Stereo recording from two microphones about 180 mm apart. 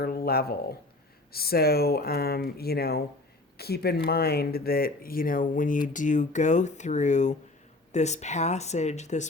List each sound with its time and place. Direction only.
0.0 s speech: 55° left (ahead or behind); by 9.2 s 40° left (ahead or behind)